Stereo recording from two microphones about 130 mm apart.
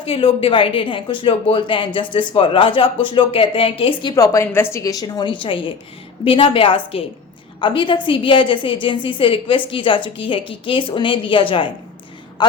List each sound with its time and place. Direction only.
0.0 s a woman's voice: 45° left (ahead or behind)
4.1 s a woman's voice: 25° left (ahead or behind)